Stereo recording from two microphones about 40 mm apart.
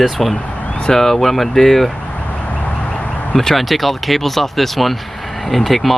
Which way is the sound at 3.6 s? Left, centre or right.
Centre.